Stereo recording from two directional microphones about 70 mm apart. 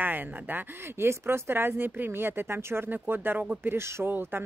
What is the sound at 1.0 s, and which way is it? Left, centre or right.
Speech, right.